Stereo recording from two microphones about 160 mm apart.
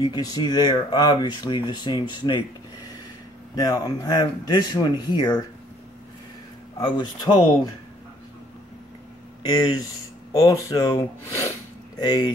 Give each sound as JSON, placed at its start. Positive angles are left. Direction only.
{"t": 0.0, "sound": "speech", "side_deg": 25}
{"t": 3.5, "sound": "speech", "side_deg": 25}
{"t": 6.8, "sound": "speech", "side_deg": 30}
{"t": 10.3, "sound": "speech", "side_deg": 20}